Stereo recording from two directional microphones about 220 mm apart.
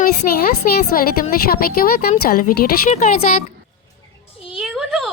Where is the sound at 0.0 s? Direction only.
40° left (ahead or behind).